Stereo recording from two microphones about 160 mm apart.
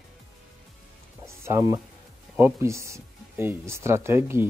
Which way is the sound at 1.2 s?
15° right (ahead or behind).